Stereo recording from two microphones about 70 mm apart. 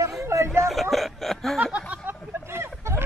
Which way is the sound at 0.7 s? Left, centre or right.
Centre.